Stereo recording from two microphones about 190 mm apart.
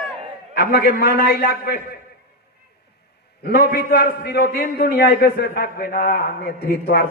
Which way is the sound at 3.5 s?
55° left (ahead or behind).